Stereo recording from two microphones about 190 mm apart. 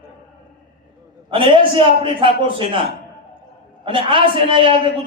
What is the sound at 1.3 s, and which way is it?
A man's voice, 30° right (ahead or behind).